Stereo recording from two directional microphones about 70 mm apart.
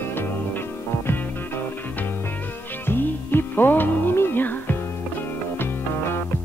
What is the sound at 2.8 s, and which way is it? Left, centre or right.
Music, left.